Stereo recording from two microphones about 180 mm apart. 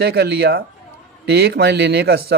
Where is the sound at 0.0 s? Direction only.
65° right (ahead or behind).